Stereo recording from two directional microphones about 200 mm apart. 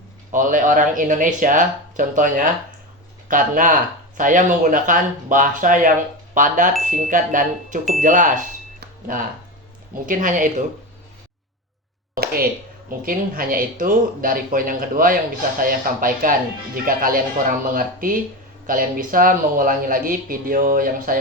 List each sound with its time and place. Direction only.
0.3 s speech: 40° right (ahead or behind)
10.1 s speech: 40° right (ahead or behind)
12.1 s a sound: 45° right (ahead or behind)
12.9 s speech: 45° right (ahead or behind)